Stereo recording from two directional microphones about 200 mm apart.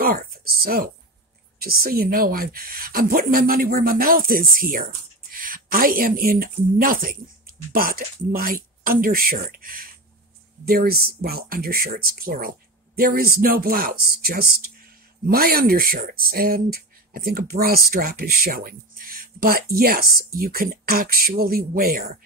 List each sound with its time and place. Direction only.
0.0 s speech: 45° right (ahead or behind)